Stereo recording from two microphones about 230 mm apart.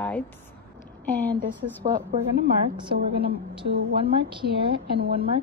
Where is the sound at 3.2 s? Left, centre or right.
Right.